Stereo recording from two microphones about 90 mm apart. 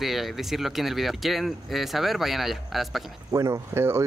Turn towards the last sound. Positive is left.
turn(degrees=-30)  # may be behind; listen again after turning